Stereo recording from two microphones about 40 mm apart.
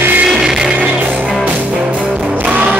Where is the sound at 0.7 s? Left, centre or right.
Right.